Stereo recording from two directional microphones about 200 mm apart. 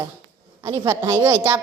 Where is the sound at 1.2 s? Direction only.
10° right (ahead or behind).